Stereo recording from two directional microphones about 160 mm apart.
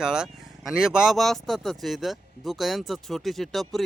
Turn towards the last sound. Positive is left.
turn(degrees=0)  # may be behind; listen again after turning